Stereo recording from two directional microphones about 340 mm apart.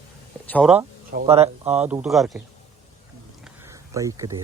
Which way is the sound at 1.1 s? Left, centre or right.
Centre.